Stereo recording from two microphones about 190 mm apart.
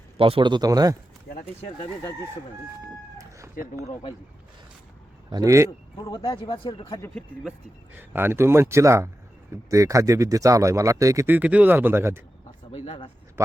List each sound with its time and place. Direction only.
0.2 s speech: 30° right (ahead or behind)
1.3 s a sound: 55° left (ahead or behind)
2.8 s chicken: 15° right (ahead or behind)
5.3 s speech: 15° right (ahead or behind)
6.0 s speech: 20° left (ahead or behind)
7.0 s speech: 5° left (ahead or behind)
7.9 s speech: 10° right (ahead or behind)
12.7 s speech: 30° left (ahead or behind)